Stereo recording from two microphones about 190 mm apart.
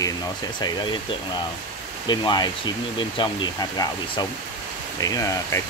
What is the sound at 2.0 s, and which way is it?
Speech, 20° left (ahead or behind).